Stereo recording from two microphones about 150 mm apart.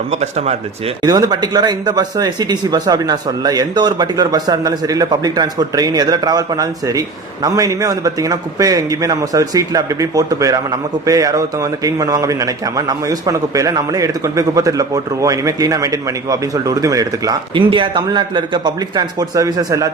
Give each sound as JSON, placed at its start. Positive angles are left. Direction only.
{"t": 0.1, "sound": "speech", "side_deg": -45}
{"t": 1.0, "sound": "a man's voice", "side_deg": -25}